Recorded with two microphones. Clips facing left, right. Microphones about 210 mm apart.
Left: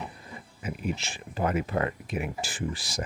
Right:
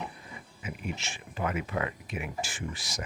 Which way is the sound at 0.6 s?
35° left (ahead or behind).